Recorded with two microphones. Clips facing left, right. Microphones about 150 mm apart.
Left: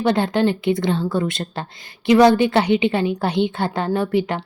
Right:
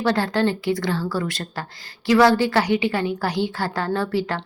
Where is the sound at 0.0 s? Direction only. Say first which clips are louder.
Left 3 dB; 20° left (ahead or behind).